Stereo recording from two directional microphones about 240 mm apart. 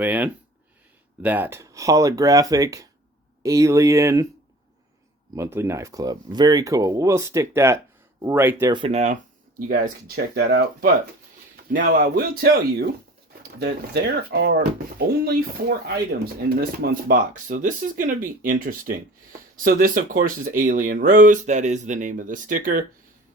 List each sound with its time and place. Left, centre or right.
0.0 s speech: centre
5.3 s speech: centre; by 22.8 s right